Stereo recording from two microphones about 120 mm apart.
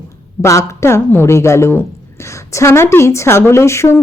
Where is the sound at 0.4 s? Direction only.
25° left (ahead or behind).